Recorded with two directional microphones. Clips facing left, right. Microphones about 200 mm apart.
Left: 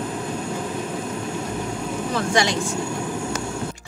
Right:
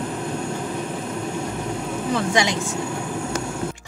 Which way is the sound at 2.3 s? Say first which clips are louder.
Left 2 dB; 20° right (ahead or behind).